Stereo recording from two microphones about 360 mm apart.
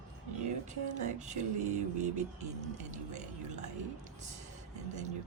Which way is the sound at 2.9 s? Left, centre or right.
Centre.